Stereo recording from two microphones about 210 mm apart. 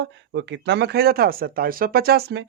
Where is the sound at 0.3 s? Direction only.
55° right (ahead or behind).